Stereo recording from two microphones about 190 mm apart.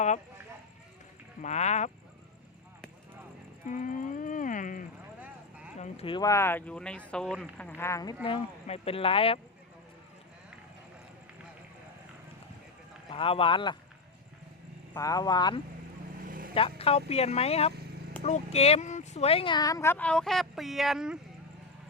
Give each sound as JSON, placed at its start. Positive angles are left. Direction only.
{"t": 1.4, "sound": "speech", "side_deg": 35}
{"t": 3.7, "sound": "livestock", "side_deg": 45}
{"t": 5.7, "sound": "speech", "side_deg": 35}
{"t": 8.2, "sound": "speech", "side_deg": 30}
{"t": 13.1, "sound": "speech", "side_deg": 30}
{"t": 14.9, "sound": "speech", "side_deg": 20}
{"t": 16.2, "sound": "vehicle", "side_deg": -45}
{"t": 16.6, "sound": "speech", "side_deg": 30}